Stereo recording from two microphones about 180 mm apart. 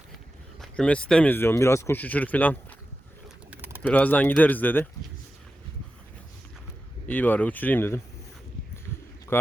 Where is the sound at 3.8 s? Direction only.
10° left (ahead or behind).